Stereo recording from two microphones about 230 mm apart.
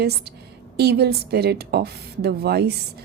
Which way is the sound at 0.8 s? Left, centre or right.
Right.